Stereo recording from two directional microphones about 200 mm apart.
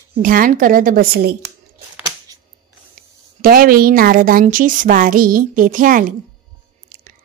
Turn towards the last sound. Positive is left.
turn(degrees=-40)  # may be behind; listen again after turning